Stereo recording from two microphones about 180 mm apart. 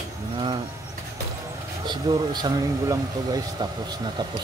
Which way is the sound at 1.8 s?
20° right (ahead or behind).